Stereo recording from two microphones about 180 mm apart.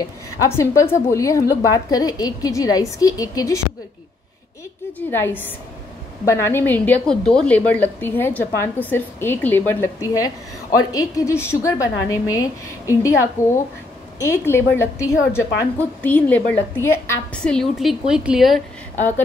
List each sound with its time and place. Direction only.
0.5 s a woman's voice: 15° left (ahead or behind)
4.9 s a woman's voice: 10° left (ahead or behind)
18.9 s a woman's voice: 10° left (ahead or behind)